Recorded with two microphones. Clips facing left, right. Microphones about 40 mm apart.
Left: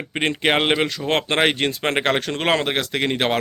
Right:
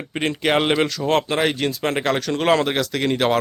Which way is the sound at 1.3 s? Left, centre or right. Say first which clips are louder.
Left 1 dB; left.